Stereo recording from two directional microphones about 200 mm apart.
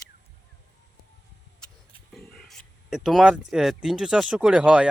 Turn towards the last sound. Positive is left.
turn(degrees=-5)  # may be behind; listen again after turning